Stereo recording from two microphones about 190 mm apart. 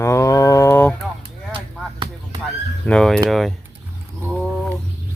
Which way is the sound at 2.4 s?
5° left (ahead or behind).